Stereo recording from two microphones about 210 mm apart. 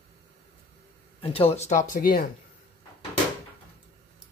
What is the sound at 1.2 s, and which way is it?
Speech, 25° left (ahead or behind).